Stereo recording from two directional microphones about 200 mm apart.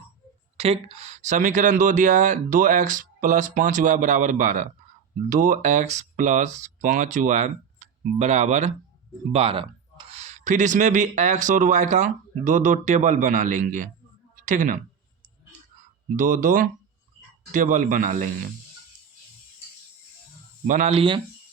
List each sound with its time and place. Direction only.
0.5 s speech: 30° right (ahead or behind)
16.1 s speech: 40° right (ahead or behind)
20.7 s speech: 35° right (ahead or behind)